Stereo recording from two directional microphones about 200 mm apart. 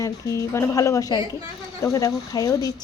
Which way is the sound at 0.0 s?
15° left (ahead or behind).